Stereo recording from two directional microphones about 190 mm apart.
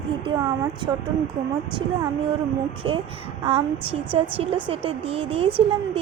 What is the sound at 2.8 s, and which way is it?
A woman's voice, 25° right (ahead or behind).